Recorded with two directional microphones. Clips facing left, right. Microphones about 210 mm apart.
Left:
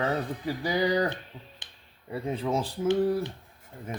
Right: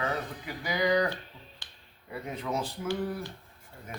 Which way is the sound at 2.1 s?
30° left (ahead or behind).